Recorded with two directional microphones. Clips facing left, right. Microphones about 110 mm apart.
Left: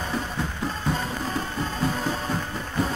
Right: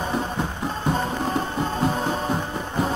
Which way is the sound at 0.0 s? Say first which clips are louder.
Right 4 dB; 20° right (ahead or behind).